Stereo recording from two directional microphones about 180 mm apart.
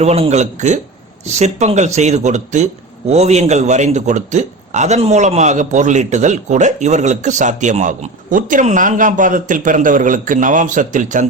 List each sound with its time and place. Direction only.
0.0 s a man's voice: 35° right (ahead or behind)